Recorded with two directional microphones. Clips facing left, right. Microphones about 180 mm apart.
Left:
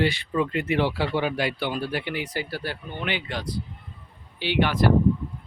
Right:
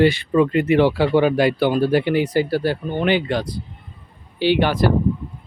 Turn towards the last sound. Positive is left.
turn(degrees=-35)  # may be behind; listen again after turning